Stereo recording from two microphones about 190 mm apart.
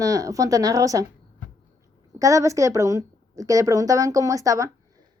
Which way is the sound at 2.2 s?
15° right (ahead or behind).